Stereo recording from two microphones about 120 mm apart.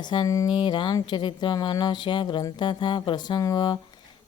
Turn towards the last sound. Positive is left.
turn(degrees=40)  # may be behind; listen again after turning